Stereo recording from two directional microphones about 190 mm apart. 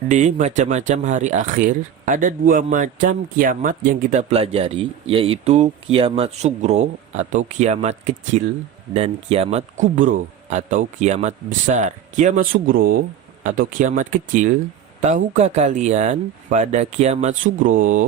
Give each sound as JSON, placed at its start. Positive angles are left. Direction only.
{"t": 0.1, "sound": "speech", "side_deg": -40}